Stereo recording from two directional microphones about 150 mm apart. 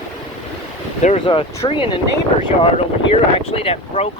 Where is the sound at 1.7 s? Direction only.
35° left (ahead or behind).